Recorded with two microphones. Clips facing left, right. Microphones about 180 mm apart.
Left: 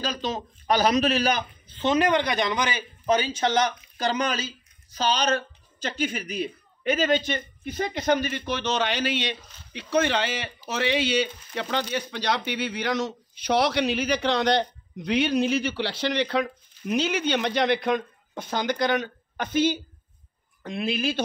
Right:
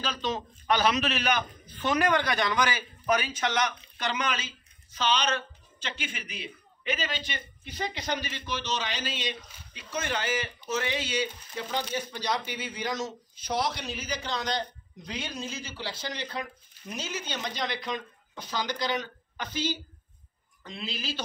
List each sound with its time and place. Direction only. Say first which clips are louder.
0.2 s speech: left 2 dB; 40° left (ahead or behind); by 21.2 s 55° left (ahead or behind)